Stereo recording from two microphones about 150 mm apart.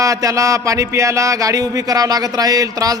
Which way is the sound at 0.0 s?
20° right (ahead or behind).